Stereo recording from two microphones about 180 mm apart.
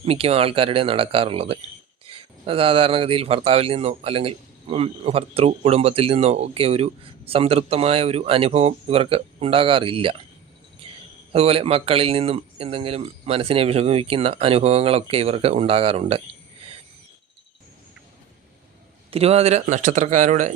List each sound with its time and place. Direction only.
0.0 s speech: 35° right (ahead or behind)
10.8 s a sound: 30° right (ahead or behind)
11.3 s speech: 35° right (ahead or behind)
19.1 s speech: 35° right (ahead or behind)